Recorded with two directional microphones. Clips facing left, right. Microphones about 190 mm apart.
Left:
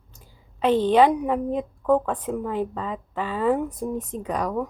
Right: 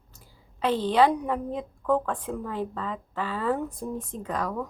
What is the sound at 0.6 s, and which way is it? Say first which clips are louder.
A woman's voice: left 4 dB; 20° left (ahead or behind).